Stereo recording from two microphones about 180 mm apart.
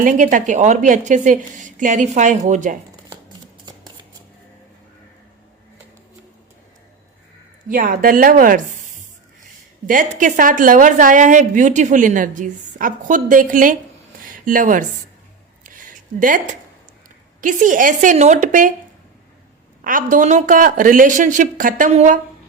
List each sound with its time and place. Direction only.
0.0 s a woman's voice: 45° right (ahead or behind)
3.7 s a sound: 25° right (ahead or behind)
7.7 s a woman's voice: 50° right (ahead or behind)
9.8 s a woman's voice: 45° right (ahead or behind)
15.6 s a sound: 50° right (ahead or behind)
17.4 s a woman's voice: 45° right (ahead or behind)
19.8 s a woman's voice: 50° right (ahead or behind)